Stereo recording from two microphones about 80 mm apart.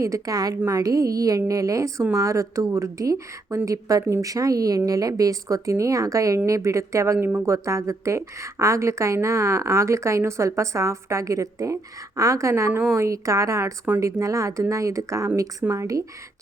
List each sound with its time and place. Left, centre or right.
0.0 s a woman's voice: right